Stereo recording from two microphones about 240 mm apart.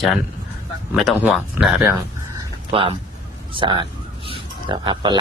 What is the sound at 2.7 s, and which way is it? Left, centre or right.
A man's voice, right.